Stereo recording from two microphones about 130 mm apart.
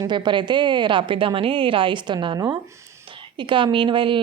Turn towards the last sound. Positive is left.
turn(degrees=-40)  # may be behind; listen again after turning